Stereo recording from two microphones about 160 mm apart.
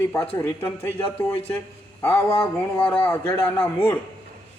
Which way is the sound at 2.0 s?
15° left (ahead or behind).